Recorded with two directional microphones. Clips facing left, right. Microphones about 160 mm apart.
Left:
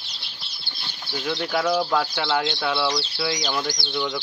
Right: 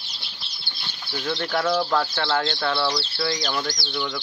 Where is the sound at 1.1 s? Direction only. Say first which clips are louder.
Left 1 dB; 10° left (ahead or behind).